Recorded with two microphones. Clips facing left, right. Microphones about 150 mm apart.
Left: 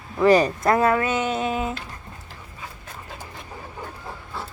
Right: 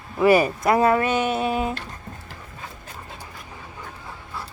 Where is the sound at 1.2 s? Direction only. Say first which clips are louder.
Right 2 dB; 10° right (ahead or behind).